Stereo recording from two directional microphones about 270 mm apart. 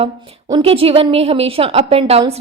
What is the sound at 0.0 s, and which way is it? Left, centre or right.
A woman's voice, right.